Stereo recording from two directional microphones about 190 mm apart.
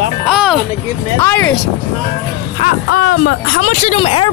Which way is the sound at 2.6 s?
45° left (ahead or behind).